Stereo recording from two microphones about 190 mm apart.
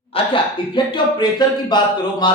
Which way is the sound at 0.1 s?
30° left (ahead or behind).